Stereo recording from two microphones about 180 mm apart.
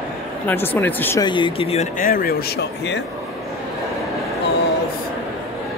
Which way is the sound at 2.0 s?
55° left (ahead or behind).